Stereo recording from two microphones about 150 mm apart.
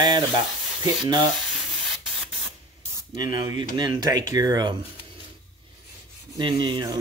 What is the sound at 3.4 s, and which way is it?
Speech, 30° right (ahead or behind).